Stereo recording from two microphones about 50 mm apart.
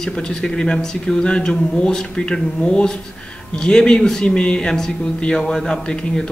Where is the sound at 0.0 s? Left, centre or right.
Centre.